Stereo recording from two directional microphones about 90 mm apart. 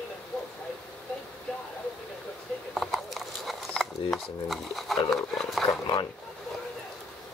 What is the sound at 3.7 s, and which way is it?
Speech, 5° left (ahead or behind).